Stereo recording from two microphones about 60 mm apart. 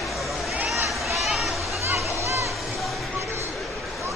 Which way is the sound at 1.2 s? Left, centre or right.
Centre.